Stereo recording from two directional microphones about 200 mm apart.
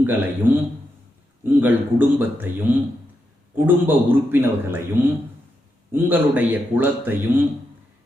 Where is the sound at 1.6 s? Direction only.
10° right (ahead or behind).